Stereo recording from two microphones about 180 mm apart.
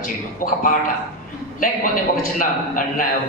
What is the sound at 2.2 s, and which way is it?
Speech, 50° left (ahead or behind).